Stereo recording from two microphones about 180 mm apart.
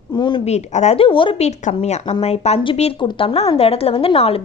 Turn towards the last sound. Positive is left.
turn(degrees=30)  # may be behind; listen again after turning